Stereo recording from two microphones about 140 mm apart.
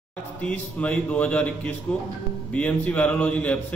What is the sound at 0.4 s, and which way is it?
A man's voice, 10° left (ahead or behind).